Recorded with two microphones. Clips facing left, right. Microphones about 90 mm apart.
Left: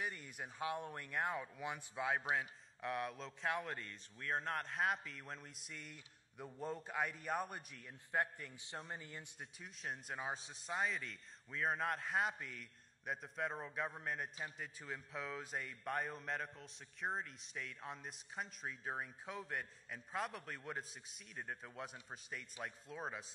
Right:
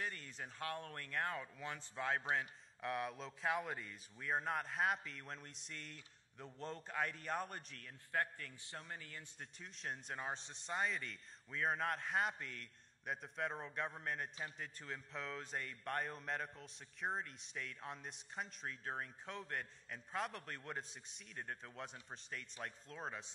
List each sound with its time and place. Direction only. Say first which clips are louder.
0.0 s a man's voice: left 1 dB; 10° left (ahead or behind)
9.4 s a man's voice: right 2 dB; 5° left (ahead or behind)